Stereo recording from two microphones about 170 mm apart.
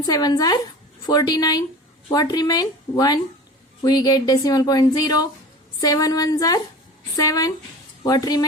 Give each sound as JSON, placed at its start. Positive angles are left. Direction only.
{"t": 0.0, "sound": "a woman's voice", "side_deg": 20}